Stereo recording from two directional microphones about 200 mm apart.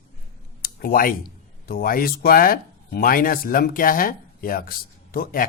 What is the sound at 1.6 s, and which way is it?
Speech, 45° left (ahead or behind).